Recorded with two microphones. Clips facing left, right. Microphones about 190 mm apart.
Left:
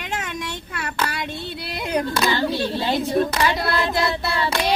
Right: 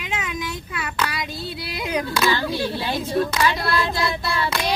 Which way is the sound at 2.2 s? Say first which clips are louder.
Left 1 dB; 15° left (ahead or behind).